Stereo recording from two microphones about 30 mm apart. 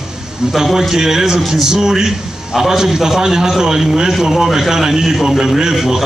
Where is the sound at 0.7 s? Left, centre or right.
Centre.